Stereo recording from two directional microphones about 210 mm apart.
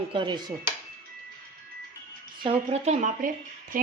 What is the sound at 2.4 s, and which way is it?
A woman's voice, 30° right (ahead or behind).